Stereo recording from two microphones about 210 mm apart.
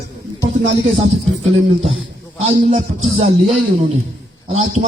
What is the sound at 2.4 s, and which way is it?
Speech, 35° right (ahead or behind).